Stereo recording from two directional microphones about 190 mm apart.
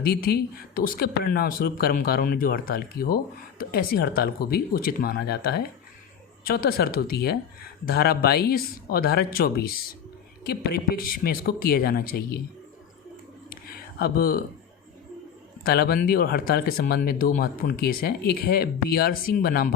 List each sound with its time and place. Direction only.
0.0 s speech: 55° left (ahead or behind)
14.0 s speech: 50° left (ahead or behind)
15.6 s speech: 55° left (ahead or behind)